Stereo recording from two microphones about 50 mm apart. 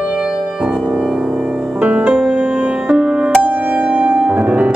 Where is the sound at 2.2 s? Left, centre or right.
Centre.